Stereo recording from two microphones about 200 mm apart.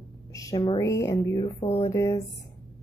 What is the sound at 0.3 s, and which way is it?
Speech, 15° left (ahead or behind).